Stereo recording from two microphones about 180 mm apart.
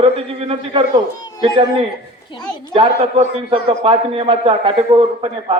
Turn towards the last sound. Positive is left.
turn(degrees=-30)  # may be behind; listen again after turning